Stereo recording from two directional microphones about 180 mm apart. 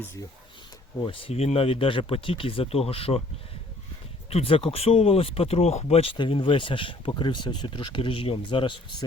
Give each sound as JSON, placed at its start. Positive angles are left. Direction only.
{"t": 0.9, "sound": "speech", "side_deg": 30}
{"t": 4.3, "sound": "speech", "side_deg": 30}